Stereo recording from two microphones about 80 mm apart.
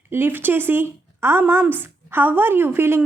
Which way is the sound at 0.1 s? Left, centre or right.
Right.